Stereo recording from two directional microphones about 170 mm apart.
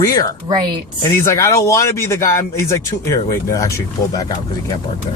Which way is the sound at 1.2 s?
15° left (ahead or behind).